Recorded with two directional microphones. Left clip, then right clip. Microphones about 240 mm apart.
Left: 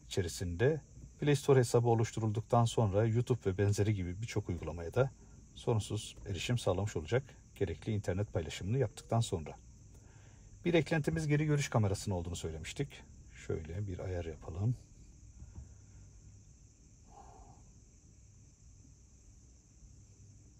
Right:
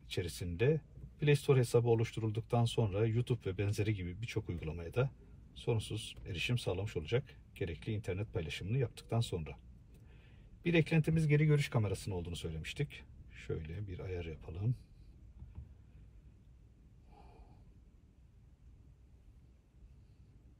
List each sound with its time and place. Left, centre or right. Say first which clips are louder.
0.1 s speech: left 3 dB; left
10.6 s speech: left 2 dB; left